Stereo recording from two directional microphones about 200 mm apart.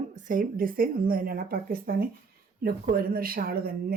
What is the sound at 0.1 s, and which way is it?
Speech, 40° right (ahead or behind).